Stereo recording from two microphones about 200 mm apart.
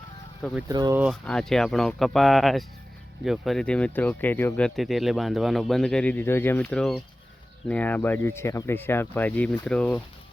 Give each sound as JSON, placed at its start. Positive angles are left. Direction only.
{"t": 0.7, "sound": "speech", "side_deg": -20}
{"t": 0.9, "sound": "speech", "side_deg": -5}